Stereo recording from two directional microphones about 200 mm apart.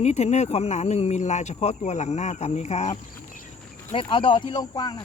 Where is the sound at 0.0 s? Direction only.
35° left (ahead or behind).